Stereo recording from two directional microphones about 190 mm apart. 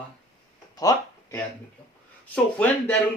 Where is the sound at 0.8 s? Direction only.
20° left (ahead or behind).